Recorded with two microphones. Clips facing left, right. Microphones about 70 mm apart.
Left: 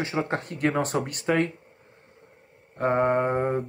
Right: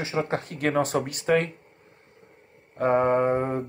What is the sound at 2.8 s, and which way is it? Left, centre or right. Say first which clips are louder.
Speech: right 1 dB; left.